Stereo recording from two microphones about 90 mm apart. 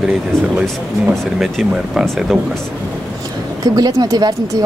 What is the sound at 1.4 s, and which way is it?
Speech, 5° right (ahead or behind).